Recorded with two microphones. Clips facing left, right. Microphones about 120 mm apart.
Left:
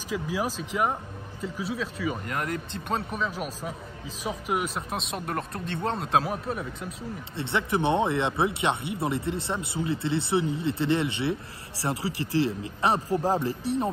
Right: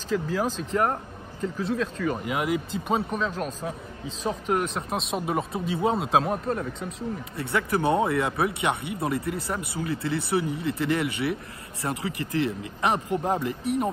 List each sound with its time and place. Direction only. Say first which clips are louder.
0.1 s speech: right 3 dB; 10° left (ahead or behind)
7.3 s speech: even; 25° left (ahead or behind)